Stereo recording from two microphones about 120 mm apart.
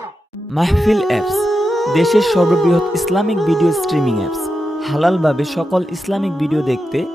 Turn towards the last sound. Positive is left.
turn(degrees=0)  # may be behind; listen again after turning